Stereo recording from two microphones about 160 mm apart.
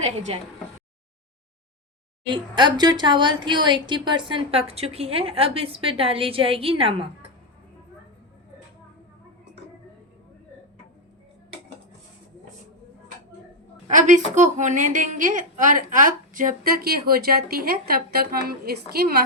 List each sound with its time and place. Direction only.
2.3 s speech: 30° right (ahead or behind)
13.8 s a woman's voice: 50° right (ahead or behind); by 19.1 s 80° right